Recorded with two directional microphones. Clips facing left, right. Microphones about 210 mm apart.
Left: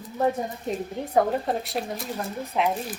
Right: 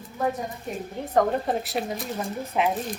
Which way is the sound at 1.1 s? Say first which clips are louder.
Even; centre (ahead or behind).